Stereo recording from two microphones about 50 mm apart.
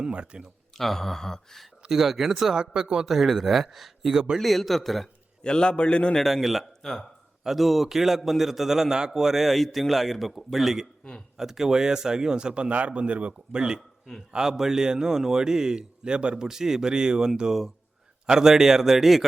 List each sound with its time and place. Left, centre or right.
0.0 s speech: right
0.8 s speech: centre
1.9 s a man's voice: centre
4.1 s a man's voice: centre
4.4 s a man's voice: centre
5.4 s a man's voice: centre
6.1 s a man's voice: centre
11.0 s speech: centre
11.3 s a man's voice: centre